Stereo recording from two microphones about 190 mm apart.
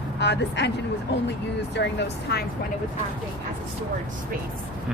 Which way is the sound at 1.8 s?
60° left (ahead or behind).